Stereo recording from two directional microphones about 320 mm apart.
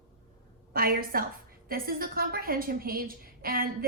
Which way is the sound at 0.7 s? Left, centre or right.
Right.